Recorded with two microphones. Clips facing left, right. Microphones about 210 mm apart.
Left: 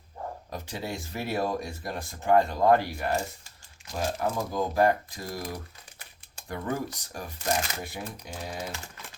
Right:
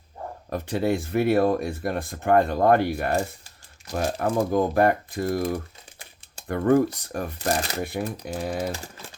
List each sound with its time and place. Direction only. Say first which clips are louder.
0.5 s speech: right 13 dB; 55° right (ahead or behind)